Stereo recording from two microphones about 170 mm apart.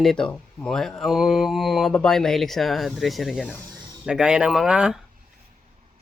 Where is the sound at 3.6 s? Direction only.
25° right (ahead or behind).